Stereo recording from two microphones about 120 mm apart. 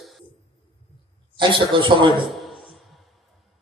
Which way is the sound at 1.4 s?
45° right (ahead or behind).